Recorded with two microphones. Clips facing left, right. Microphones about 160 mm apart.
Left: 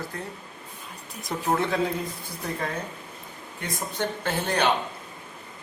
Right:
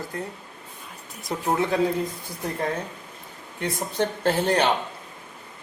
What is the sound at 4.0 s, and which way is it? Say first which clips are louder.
Speech: right 6 dB; 35° right (ahead or behind).